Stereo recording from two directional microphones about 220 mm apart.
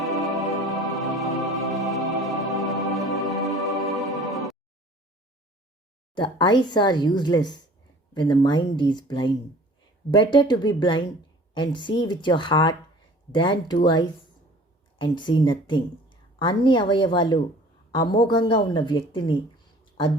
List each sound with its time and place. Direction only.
0.0 s music: centre (ahead or behind)
6.1 s a woman's voice: 20° left (ahead or behind)